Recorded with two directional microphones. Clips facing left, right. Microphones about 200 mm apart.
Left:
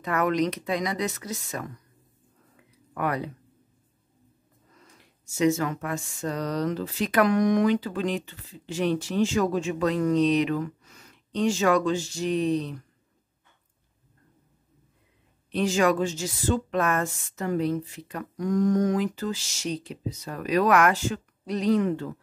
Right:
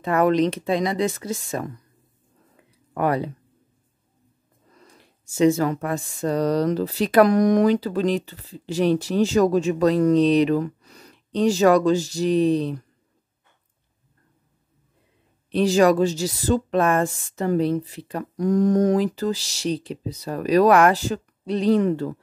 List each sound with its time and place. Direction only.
0.0 s speech: 30° right (ahead or behind)
2.9 s speech: 30° right (ahead or behind)
4.9 s speech: 30° right (ahead or behind)
15.5 s speech: 35° right (ahead or behind)